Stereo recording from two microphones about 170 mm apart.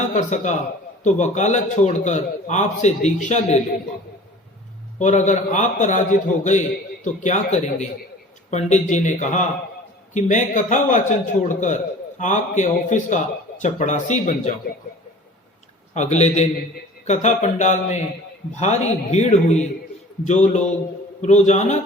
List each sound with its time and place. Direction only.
0.1 s a man's voice: 45° left (ahead or behind)
4.9 s a man's voice: 45° left (ahead or behind)
16.0 s a man's voice: 40° left (ahead or behind)